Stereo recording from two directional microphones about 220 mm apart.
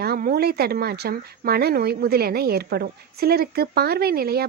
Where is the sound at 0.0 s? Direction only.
45° right (ahead or behind).